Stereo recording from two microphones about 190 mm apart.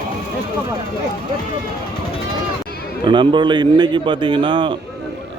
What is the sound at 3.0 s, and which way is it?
A man's voice, 25° right (ahead or behind).